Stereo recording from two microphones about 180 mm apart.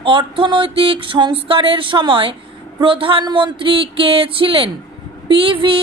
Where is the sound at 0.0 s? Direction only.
25° right (ahead or behind).